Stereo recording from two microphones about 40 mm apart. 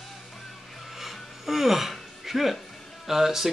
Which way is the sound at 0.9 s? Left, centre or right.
Centre.